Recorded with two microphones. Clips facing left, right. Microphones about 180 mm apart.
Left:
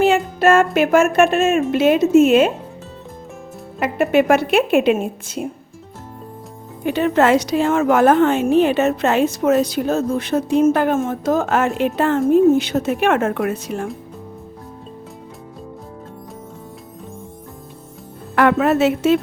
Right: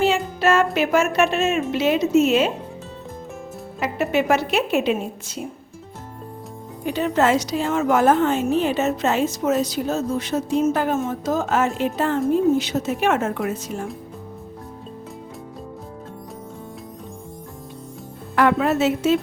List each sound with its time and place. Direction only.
0.0 s music: 50° left (ahead or behind)
1.7 s a woman's voice: 50° left (ahead or behind)
3.8 s a woman's voice: 50° left (ahead or behind)
6.8 s a woman's voice: 65° left (ahead or behind)
18.3 s a woman's voice: 65° left (ahead or behind)